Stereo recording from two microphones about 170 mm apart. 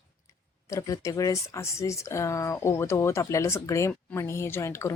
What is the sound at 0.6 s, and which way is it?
Speech, 20° left (ahead or behind).